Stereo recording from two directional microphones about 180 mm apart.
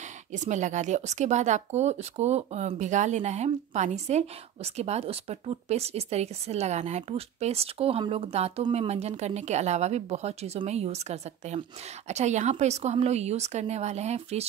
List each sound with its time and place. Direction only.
0.3 s speech: 40° right (ahead or behind)